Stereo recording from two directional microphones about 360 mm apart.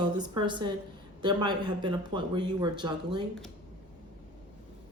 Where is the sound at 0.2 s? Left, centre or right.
Centre.